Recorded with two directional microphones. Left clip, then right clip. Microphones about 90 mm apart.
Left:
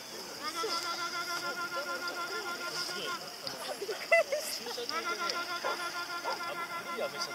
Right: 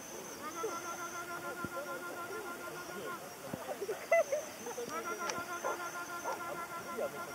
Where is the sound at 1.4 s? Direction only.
30° left (ahead or behind).